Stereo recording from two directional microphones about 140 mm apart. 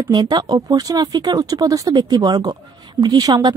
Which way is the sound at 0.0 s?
30° right (ahead or behind).